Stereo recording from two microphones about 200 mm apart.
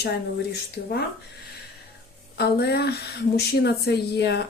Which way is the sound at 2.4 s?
55° left (ahead or behind).